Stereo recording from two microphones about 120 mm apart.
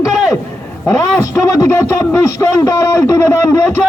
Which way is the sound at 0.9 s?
25° left (ahead or behind).